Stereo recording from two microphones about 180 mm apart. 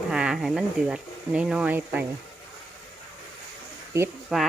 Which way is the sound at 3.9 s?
15° right (ahead or behind).